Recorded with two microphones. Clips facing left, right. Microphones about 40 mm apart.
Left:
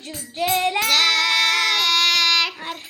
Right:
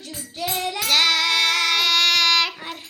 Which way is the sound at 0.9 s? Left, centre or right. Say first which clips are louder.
Right 2 dB; centre.